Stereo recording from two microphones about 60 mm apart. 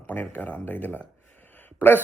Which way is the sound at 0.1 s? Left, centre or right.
Left.